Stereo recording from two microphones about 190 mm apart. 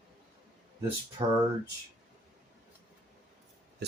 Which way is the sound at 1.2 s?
25° right (ahead or behind).